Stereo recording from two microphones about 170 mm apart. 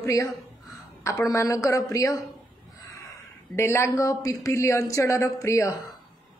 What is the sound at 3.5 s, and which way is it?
Speech, 15° left (ahead or behind).